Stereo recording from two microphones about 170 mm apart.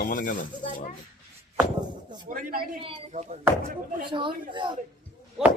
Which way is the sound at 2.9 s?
45° right (ahead or behind).